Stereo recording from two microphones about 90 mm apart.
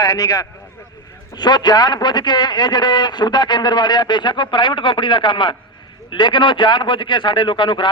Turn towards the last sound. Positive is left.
turn(degrees=65)  # may be behind; listen again after turning